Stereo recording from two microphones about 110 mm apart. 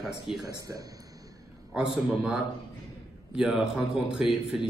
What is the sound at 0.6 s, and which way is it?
Speech, 35° right (ahead or behind).